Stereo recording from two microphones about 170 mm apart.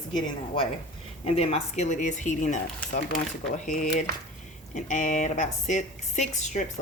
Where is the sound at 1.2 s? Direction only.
35° left (ahead or behind).